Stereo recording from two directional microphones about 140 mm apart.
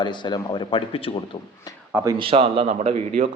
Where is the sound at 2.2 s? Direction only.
40° right (ahead or behind).